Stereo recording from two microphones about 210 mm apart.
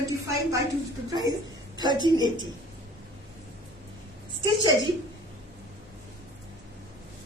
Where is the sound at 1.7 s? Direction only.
20° right (ahead or behind).